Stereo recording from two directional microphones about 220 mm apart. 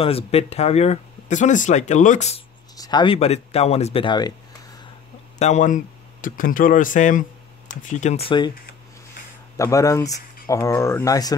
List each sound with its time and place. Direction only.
0.0 s speech: 25° left (ahead or behind)
2.7 s speech: 20° left (ahead or behind)
5.4 s speech: 35° left (ahead or behind)
9.6 s speech: 15° left (ahead or behind)